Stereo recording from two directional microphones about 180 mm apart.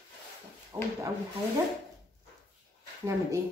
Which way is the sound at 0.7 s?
15° right (ahead or behind).